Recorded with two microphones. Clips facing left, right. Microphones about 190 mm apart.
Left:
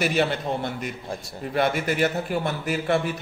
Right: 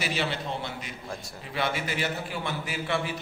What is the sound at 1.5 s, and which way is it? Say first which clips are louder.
A man's voice: left 7 dB; 50° left (ahead or behind).